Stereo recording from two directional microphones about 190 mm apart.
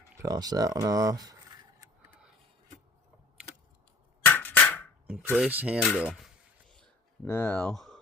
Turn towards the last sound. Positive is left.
turn(degrees=0)  # may be behind; listen again after turning